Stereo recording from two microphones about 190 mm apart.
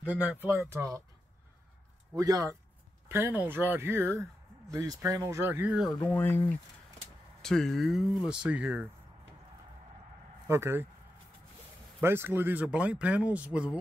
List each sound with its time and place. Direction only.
0.0 s speech: 5° right (ahead or behind)
2.1 s speech: 20° right (ahead or behind); by 6.4 s 10° left (ahead or behind)
7.4 s speech: 5° left (ahead or behind)
10.4 s speech: 15° right (ahead or behind)
12.0 s speech: 10° right (ahead or behind)